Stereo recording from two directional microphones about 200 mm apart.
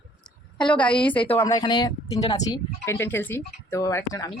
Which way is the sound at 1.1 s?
25° left (ahead or behind).